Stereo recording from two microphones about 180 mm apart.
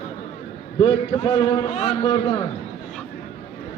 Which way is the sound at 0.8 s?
30° left (ahead or behind).